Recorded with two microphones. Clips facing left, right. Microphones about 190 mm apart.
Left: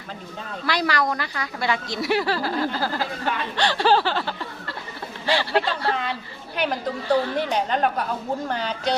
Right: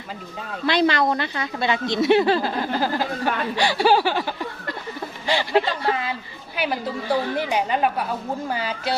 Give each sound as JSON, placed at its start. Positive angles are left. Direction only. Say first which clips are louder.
{"t": 0.6, "sound": "a woman's voice", "louder": "right 4 dB", "side_deg": -25}